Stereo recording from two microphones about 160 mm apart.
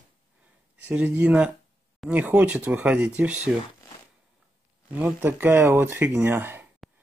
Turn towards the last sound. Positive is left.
turn(degrees=-15)  # may be behind; listen again after turning